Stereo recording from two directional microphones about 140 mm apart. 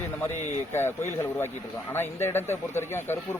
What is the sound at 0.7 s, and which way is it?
A man's voice, 20° left (ahead or behind).